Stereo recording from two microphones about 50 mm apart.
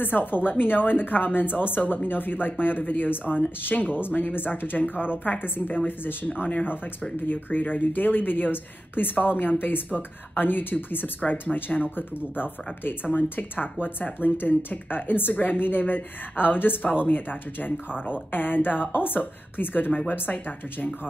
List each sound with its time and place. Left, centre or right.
0.0 s speech: left